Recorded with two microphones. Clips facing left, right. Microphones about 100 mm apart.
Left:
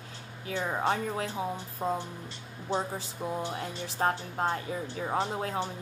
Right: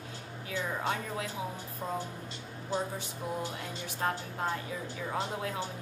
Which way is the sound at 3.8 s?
30° left (ahead or behind).